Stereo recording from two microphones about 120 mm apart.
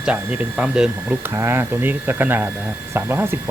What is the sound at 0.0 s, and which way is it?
Speech, 10° right (ahead or behind).